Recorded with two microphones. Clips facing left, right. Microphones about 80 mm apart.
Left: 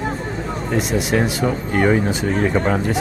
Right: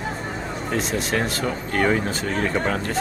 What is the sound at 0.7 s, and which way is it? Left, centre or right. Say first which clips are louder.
Speech: left 5 dB; centre.